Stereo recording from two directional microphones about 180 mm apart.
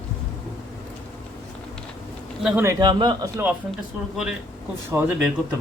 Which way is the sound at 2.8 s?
25° right (ahead or behind).